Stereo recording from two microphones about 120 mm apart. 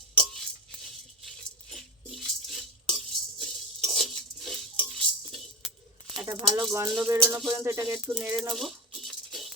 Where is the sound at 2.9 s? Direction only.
Centre (ahead or behind).